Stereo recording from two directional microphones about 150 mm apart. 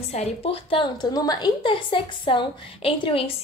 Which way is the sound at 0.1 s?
45° left (ahead or behind).